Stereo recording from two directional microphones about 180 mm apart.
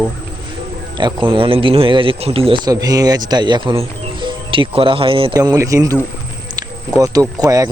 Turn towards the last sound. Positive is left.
turn(degrees=-20)  # may be behind; listen again after turning